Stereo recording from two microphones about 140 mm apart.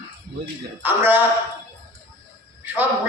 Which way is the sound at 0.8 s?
15° right (ahead or behind).